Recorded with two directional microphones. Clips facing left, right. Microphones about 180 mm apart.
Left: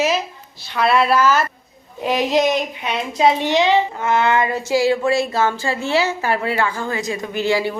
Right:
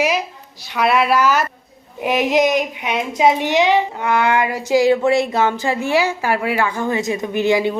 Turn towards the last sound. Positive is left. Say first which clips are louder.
# right 3 dB
turn(degrees=-20)  # may be behind; listen again after turning